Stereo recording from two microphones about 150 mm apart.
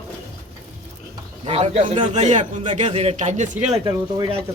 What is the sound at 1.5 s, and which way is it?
Speech, 40° right (ahead or behind).